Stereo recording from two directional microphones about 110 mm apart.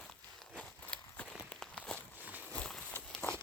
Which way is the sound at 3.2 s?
25° left (ahead or behind).